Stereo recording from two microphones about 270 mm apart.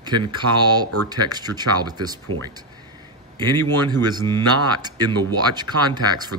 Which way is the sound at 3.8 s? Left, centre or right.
Centre.